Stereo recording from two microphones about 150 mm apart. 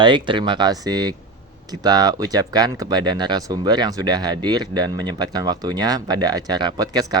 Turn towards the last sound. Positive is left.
turn(degrees=-25)  # may be behind; listen again after turning